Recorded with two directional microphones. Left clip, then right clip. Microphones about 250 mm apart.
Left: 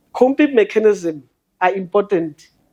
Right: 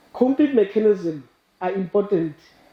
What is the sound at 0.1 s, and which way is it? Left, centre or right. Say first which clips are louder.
A woman's voice: left 5 dB; left.